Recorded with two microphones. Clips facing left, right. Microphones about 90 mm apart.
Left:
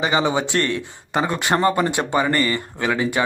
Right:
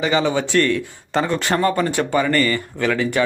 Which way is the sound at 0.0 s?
20° left (ahead or behind).